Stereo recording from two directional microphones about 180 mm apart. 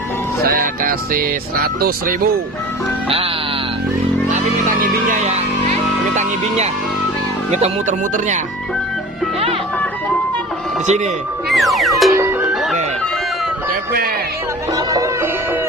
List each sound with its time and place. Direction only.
0.4 s music: 55° right (ahead or behind)
5.2 s music: 40° right (ahead or behind)
7.5 s speech: 40° right (ahead or behind)
10.8 s speech: 40° right (ahead or behind)
11.4 s music: centre (ahead or behind)
12.1 s music: 15° right (ahead or behind)
14.7 s music: 20° right (ahead or behind)